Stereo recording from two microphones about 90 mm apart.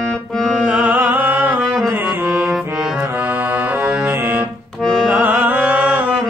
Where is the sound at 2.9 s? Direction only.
20° right (ahead or behind).